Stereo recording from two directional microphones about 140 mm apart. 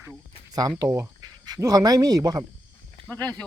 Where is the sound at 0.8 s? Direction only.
15° right (ahead or behind).